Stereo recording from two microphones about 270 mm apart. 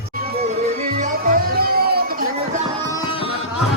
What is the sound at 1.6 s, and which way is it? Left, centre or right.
Music, right.